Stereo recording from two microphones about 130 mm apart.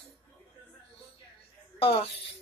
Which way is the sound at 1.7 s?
45° left (ahead or behind).